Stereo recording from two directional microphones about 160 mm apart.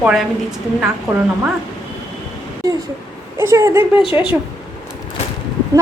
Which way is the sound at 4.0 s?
35° left (ahead or behind).